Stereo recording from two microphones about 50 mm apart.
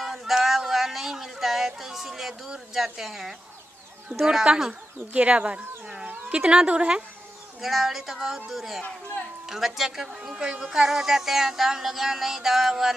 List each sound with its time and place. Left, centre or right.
0.0 s a sound: centre
2.7 s music: centre
5.1 s speech: right
6.0 s a sound: right
6.4 s speech: centre
7.6 s speech: centre
9.5 s music: centre